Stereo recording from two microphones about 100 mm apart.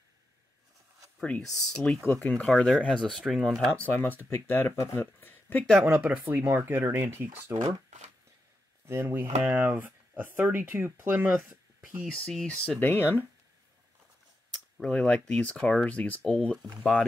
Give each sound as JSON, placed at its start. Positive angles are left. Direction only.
{"t": 1.2, "sound": "speech", "side_deg": 10}
{"t": 3.7, "sound": "speech", "side_deg": 15}
{"t": 5.9, "sound": "speech", "side_deg": -15}
{"t": 8.8, "sound": "speech", "side_deg": -20}
{"t": 12.1, "sound": "speech", "side_deg": 5}
{"t": 14.8, "sound": "speech", "side_deg": 10}